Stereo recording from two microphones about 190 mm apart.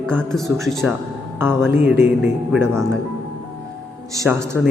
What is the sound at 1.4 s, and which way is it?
Speech, 10° right (ahead or behind).